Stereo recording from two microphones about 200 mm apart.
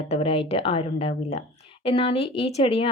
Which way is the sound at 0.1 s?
30° left (ahead or behind).